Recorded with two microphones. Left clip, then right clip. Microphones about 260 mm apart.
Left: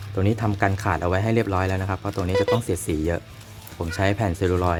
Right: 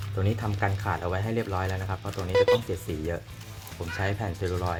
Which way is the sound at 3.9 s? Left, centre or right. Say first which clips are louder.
Left 8 dB; left.